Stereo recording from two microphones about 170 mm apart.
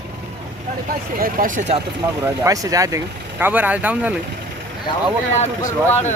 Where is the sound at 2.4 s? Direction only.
20° right (ahead or behind).